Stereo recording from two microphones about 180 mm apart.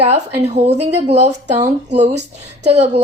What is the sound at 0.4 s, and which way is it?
Speech, 35° right (ahead or behind).